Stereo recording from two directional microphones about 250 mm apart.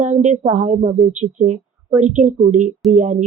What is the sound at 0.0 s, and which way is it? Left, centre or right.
A woman's voice, right.